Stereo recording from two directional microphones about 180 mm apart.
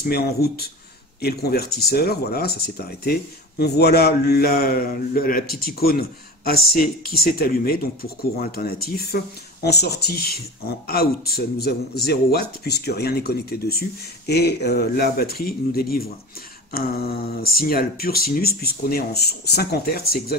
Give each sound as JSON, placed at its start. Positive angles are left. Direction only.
{"t": 0.0, "sound": "speech", "side_deg": 60}